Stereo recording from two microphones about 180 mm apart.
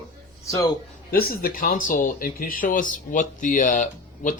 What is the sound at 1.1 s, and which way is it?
Speech, 55° left (ahead or behind).